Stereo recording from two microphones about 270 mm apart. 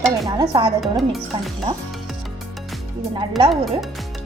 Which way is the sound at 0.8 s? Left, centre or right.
Centre.